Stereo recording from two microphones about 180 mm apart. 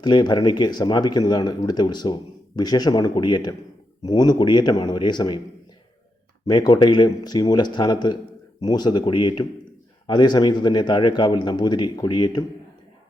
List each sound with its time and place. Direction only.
0.0 s a man's voice: 25° left (ahead or behind)
6.4 s a man's voice: 25° left (ahead or behind)